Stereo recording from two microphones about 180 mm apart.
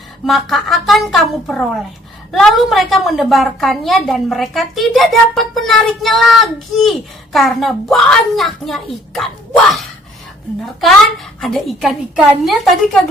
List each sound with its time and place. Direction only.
0.3 s a woman's voice: centre (ahead or behind)
11.3 s a woman's voice: centre (ahead or behind)